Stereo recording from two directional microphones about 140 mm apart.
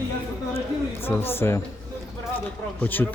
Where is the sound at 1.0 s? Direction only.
15° left (ahead or behind).